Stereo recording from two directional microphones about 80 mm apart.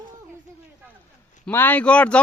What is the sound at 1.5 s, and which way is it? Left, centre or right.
Speech, left.